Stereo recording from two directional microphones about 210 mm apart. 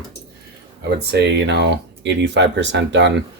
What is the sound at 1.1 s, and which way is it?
Speech, 55° right (ahead or behind).